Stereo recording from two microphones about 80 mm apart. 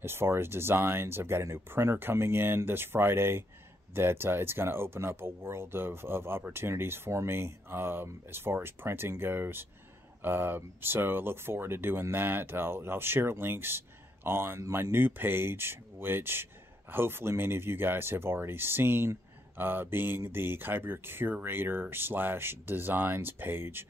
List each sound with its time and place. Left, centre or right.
0.0 s speech: right